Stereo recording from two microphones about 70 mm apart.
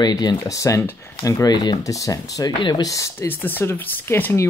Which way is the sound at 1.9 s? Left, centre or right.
Left.